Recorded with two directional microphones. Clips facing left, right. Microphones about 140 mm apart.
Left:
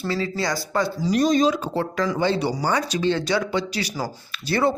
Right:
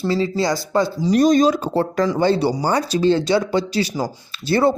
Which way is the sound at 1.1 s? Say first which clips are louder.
Right 5 dB; 40° right (ahead or behind).